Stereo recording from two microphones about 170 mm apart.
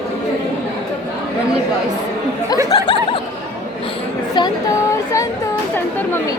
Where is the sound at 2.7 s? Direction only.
30° left (ahead or behind).